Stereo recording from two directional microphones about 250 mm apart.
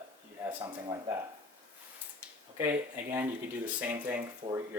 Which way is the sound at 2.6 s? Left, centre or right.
Centre.